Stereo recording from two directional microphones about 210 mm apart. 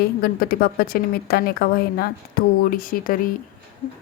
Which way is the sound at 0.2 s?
45° left (ahead or behind).